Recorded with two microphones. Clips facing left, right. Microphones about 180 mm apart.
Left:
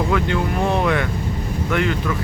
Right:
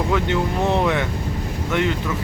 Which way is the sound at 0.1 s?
20° right (ahead or behind).